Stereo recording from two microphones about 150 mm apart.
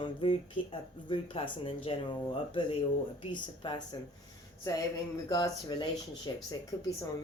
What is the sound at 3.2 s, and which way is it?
Speech, 30° left (ahead or behind).